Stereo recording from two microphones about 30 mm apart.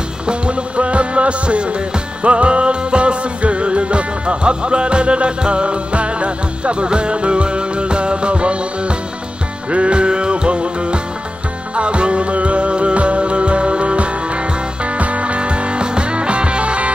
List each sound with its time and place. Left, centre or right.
0.3 s music: right